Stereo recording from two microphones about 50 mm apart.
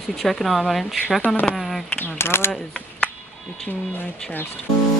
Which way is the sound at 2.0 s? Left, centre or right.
Left.